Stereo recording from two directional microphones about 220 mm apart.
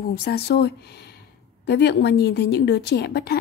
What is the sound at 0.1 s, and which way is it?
A woman's voice, 45° left (ahead or behind).